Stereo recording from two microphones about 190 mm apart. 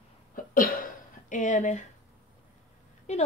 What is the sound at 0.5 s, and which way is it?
Cough, 45° left (ahead or behind).